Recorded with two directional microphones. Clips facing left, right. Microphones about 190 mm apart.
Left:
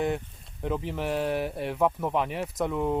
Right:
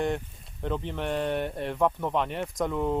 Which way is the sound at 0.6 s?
5° left (ahead or behind).